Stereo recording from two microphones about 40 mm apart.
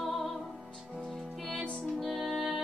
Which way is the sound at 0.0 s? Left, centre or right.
Centre.